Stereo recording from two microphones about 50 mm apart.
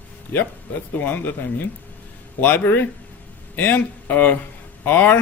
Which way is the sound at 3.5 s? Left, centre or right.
Left.